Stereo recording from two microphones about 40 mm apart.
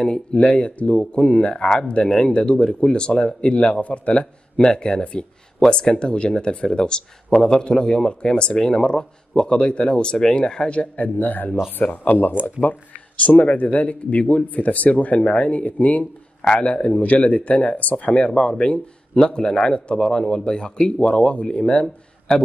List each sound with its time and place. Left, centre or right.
0.0 s speech: left
3.8 s speech: left
11.0 s speech: left
16.6 s speech: left
17.0 s speech: left
18.3 s speech: left
22.3 s speech: centre